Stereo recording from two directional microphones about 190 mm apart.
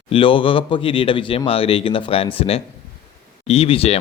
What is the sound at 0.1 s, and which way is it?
Speech, 25° left (ahead or behind).